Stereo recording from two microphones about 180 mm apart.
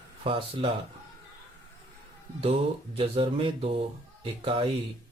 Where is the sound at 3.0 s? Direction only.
30° right (ahead or behind).